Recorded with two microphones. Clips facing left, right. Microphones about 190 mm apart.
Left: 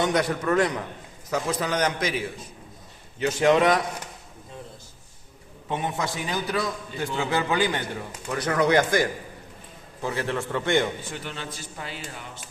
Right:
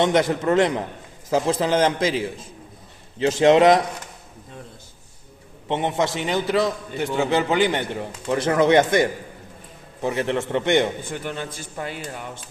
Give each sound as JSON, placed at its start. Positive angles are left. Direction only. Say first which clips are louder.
{"t": 0.0, "sound": "a man's voice", "louder": "right 5 dB", "side_deg": -25}
{"t": 5.6, "sound": "a man's voice", "louder": "right 6 dB", "side_deg": -25}
{"t": 11.0, "sound": "speech", "louder": "right 5 dB", "side_deg": -50}